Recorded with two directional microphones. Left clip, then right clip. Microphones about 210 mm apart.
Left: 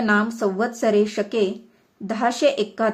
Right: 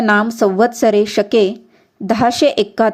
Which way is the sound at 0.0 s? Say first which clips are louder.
Right 7 dB; 30° right (ahead or behind).